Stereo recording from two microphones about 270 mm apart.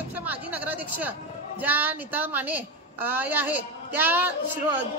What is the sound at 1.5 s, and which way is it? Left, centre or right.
A woman's voice, centre.